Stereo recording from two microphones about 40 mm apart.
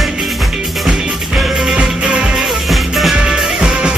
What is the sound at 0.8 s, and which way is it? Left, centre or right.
Music, centre.